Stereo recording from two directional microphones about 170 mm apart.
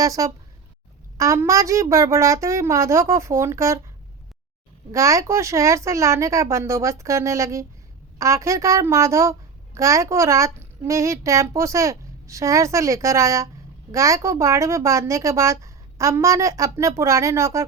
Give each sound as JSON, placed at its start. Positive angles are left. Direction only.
{"t": 0.0, "sound": "a woman's voice", "side_deg": -20}
{"t": 4.9, "sound": "a woman's voice", "side_deg": -20}